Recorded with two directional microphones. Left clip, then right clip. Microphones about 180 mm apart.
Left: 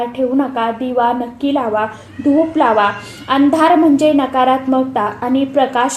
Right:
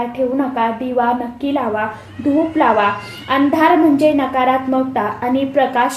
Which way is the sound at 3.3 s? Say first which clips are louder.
Left 2 dB; 30° left (ahead or behind).